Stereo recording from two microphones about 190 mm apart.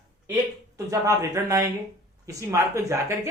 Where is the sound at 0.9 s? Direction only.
15° right (ahead or behind).